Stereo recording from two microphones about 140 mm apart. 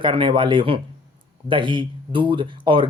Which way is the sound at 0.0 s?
35° right (ahead or behind).